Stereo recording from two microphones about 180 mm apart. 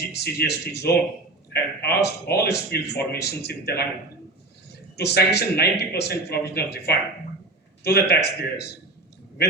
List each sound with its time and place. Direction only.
0.0 s speech: 65° left (ahead or behind)
4.9 s speech: 65° left (ahead or behind)